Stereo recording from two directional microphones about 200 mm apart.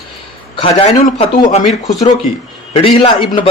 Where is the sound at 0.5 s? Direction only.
25° left (ahead or behind).